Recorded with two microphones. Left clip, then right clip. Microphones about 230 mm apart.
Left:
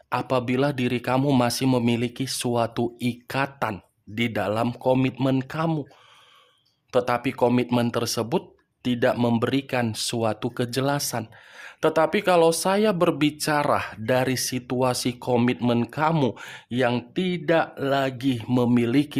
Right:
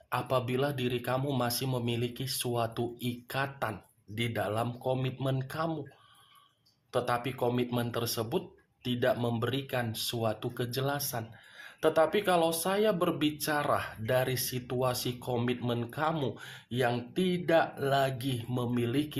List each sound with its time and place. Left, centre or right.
0.1 s speech: left
6.9 s speech: left